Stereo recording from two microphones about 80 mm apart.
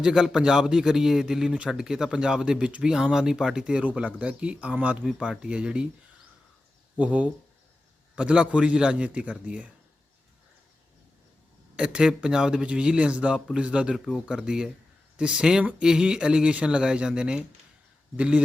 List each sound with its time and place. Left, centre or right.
0.0 s speech: centre
6.9 s speech: centre
11.8 s speech: centre
13.9 s speech: centre
14.3 s speech: centre